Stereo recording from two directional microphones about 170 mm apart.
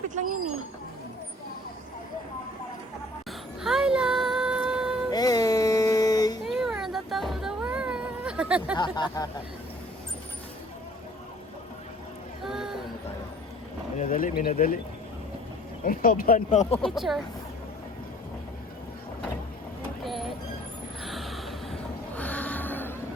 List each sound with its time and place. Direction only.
3.6 s music: centre (ahead or behind)
5.1 s a sound: 20° left (ahead or behind)
6.4 s music: centre (ahead or behind)
8.7 s speech: 25° left (ahead or behind)
12.4 s a sound: centre (ahead or behind)
13.9 s speech: 50° left (ahead or behind)
15.8 s speech: 55° left (ahead or behind); by 16.8 s 40° left (ahead or behind)
16.8 s speech: centre (ahead or behind)
20.0 s vehicle: centre (ahead or behind)
21.0 s a sound: centre (ahead or behind)